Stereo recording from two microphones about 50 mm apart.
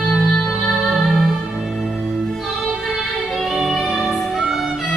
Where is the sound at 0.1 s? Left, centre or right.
Centre.